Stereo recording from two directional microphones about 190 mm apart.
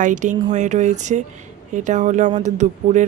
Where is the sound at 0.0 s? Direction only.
40° right (ahead or behind).